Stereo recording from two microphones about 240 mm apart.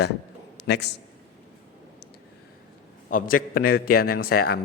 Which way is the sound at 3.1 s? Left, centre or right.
Left.